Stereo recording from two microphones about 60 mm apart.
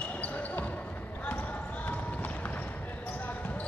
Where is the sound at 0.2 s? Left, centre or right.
Left.